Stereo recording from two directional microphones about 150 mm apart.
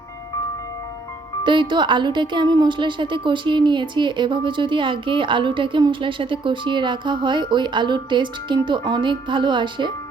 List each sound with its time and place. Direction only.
1.5 s a woman's voice: 30° right (ahead or behind)